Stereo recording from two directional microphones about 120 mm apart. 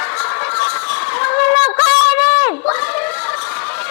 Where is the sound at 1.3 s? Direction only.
20° left (ahead or behind).